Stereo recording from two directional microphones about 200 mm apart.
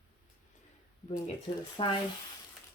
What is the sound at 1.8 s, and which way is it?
Speech, 25° left (ahead or behind).